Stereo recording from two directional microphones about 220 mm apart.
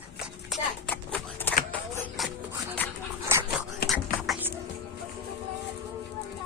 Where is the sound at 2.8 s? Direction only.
10° left (ahead or behind).